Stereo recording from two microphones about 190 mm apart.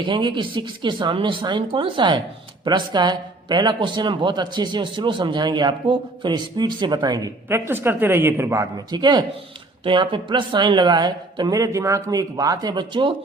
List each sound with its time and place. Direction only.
0.0 s speech: 25° right (ahead or behind)
7.7 s speech: 10° right (ahead or behind)